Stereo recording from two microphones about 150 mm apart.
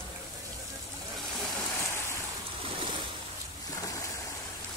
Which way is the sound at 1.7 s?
20° left (ahead or behind).